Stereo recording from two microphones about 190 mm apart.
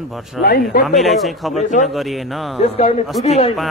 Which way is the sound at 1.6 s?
40° left (ahead or behind).